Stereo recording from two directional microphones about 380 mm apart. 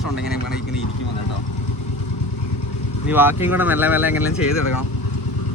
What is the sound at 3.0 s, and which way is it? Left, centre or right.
Speech, centre.